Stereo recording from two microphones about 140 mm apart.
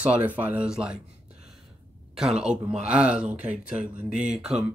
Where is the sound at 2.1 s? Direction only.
5° right (ahead or behind).